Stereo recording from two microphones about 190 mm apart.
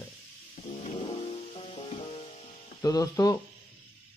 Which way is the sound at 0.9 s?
30° left (ahead or behind).